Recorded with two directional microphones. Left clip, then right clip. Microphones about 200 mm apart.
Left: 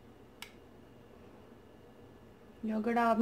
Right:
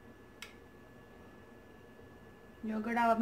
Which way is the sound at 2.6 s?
40° left (ahead or behind).